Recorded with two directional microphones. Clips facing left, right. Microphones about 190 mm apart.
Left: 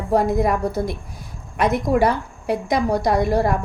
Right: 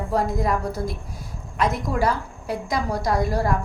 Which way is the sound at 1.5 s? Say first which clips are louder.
Left 5 dB; 65° left (ahead or behind).